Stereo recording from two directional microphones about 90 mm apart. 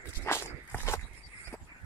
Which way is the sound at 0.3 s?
30° left (ahead or behind).